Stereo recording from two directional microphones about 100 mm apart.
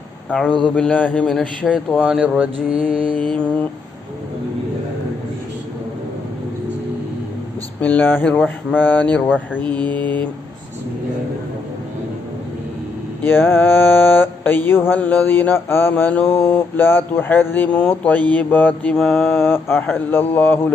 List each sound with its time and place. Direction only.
0.6 s speech: 10° left (ahead or behind)
1.3 s a man's voice: centre (ahead or behind)
2.9 s mantra: 60° right (ahead or behind)
3.2 s speech: 10° left (ahead or behind)
7.8 s speech: 15° left (ahead or behind)
13.2 s mantra: 20° left (ahead or behind)
18.9 s a man's voice: centre (ahead or behind)
19.3 s mantra: 25° left (ahead or behind)